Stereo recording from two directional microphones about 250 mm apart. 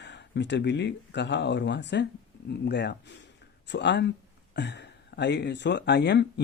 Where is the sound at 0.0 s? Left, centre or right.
Left.